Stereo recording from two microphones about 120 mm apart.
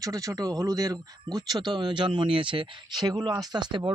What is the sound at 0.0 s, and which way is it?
Speech, 30° right (ahead or behind).